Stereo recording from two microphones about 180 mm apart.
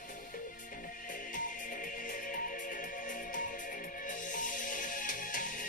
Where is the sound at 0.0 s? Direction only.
50° left (ahead or behind).